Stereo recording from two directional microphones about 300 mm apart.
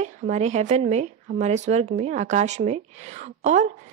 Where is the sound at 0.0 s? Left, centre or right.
Right.